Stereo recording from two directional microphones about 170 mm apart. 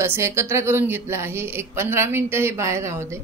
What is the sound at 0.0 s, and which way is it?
Speech, 15° right (ahead or behind).